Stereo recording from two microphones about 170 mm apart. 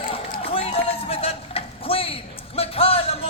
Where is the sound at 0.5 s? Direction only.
35° left (ahead or behind).